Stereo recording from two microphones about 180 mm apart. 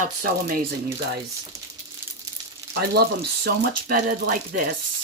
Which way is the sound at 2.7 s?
65° right (ahead or behind).